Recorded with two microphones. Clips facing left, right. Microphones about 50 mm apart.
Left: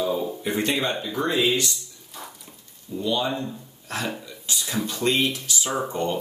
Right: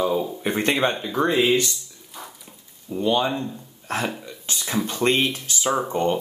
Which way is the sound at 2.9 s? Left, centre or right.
Right.